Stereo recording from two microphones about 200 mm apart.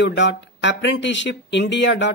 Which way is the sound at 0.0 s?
60° left (ahead or behind).